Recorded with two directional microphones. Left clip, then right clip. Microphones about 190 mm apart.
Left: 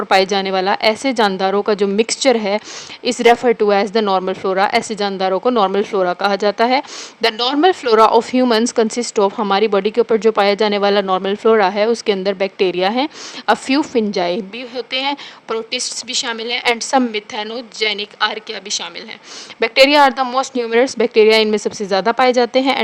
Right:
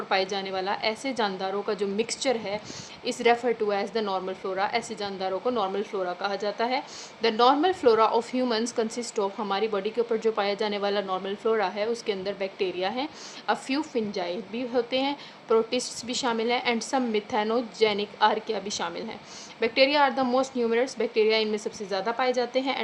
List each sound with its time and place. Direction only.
0.1 s a woman's voice: 55° left (ahead or behind)